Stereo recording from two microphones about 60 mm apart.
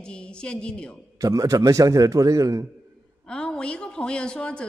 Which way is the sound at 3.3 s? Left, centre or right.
Centre.